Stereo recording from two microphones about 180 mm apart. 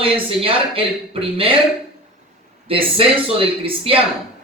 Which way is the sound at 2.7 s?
30° right (ahead or behind).